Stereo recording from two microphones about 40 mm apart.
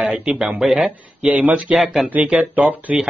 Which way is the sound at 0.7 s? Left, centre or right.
Right.